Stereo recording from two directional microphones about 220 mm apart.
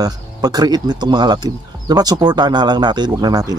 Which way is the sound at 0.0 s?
15° right (ahead or behind).